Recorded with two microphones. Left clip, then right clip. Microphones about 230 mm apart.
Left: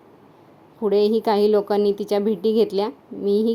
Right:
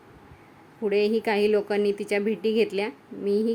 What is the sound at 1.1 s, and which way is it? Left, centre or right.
Speech, left.